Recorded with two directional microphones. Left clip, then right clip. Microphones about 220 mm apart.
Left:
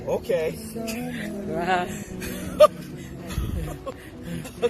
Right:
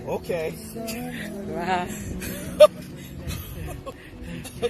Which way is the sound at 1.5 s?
45° left (ahead or behind).